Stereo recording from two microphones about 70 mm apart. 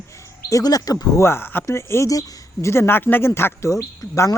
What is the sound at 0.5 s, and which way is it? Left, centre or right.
Speech, left.